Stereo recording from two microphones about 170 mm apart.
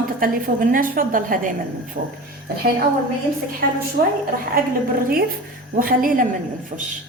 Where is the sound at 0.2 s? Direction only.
55° right (ahead or behind).